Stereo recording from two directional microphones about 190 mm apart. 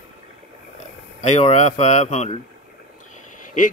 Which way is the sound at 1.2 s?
35° left (ahead or behind).